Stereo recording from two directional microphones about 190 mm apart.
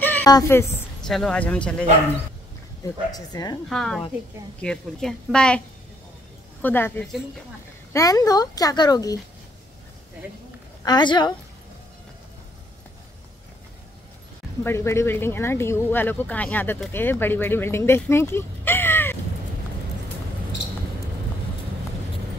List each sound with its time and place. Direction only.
0.0 s a woman's voice: 10° left (ahead or behind)
2.8 s speech: 20° left (ahead or behind)
3.6 s a woman's voice: centre (ahead or behind)
6.6 s speech: 10° left (ahead or behind)
10.8 s speech: 20° left (ahead or behind)
14.6 s speech: 15° left (ahead or behind)